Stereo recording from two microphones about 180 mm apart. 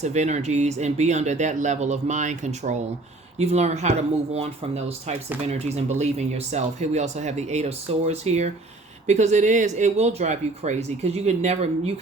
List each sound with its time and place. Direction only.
0.0 s speech: 40° right (ahead or behind)